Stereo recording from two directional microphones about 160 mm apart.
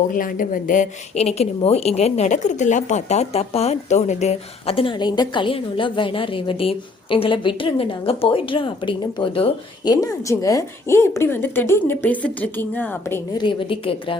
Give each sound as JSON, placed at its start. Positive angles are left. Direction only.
{"t": 0.1, "sound": "a woman's voice", "side_deg": 60}
{"t": 13.4, "sound": "a woman's voice", "side_deg": 30}